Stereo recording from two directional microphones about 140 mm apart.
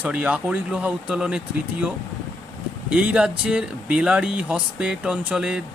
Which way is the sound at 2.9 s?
10° right (ahead or behind).